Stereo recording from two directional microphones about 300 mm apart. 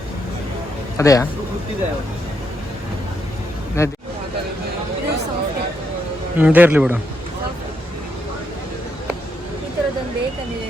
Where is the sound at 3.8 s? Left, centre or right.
Centre.